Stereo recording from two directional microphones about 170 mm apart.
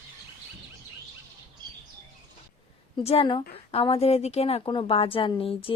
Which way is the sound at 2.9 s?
35° left (ahead or behind).